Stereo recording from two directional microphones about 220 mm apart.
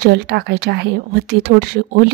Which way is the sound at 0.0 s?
45° right (ahead or behind).